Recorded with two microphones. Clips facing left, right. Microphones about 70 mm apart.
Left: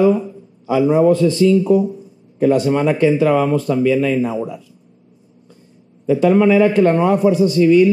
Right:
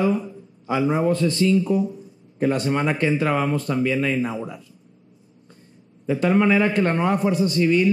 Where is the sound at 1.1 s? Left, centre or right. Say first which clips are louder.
Left 7 dB; right.